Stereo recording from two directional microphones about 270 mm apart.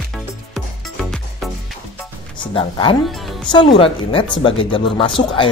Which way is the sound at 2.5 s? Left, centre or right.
Centre.